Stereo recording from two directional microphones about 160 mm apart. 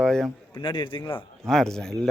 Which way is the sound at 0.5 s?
30° left (ahead or behind).